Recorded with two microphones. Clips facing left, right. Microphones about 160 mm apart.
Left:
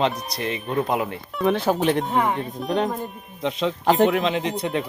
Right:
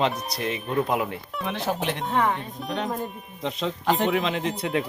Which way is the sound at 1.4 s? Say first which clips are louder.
Left 8 dB; 40° left (ahead or behind).